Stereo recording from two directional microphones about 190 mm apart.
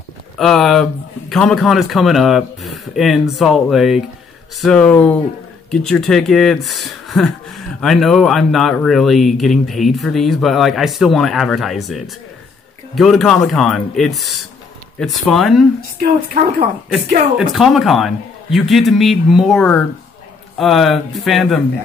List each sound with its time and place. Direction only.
0.4 s speech: centre (ahead or behind)
17.4 s speech: centre (ahead or behind)